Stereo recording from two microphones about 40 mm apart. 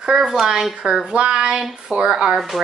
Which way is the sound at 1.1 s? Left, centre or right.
Right.